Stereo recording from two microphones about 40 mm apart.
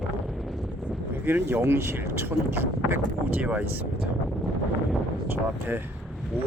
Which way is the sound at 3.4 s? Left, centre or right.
Right.